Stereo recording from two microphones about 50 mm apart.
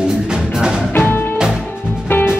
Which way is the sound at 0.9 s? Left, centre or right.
Left.